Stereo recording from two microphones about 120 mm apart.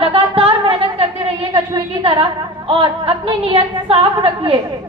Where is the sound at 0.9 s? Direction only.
45° right (ahead or behind).